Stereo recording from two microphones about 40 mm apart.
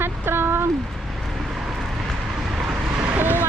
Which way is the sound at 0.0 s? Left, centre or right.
Right.